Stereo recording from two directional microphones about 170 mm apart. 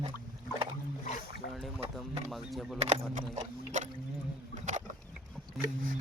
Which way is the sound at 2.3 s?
Centre (ahead or behind).